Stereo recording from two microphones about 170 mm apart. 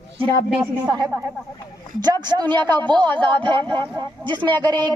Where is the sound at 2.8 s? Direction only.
25° right (ahead or behind).